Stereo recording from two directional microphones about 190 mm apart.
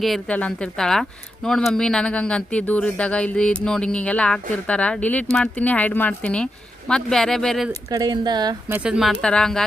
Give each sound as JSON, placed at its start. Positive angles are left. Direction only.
{"t": 0.0, "sound": "speech", "side_deg": 5}
{"t": 7.9, "sound": "speech", "side_deg": -20}
{"t": 8.7, "sound": "speech", "side_deg": -5}